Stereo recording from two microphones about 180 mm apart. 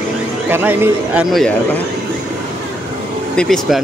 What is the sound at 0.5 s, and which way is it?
Speech, 10° right (ahead or behind).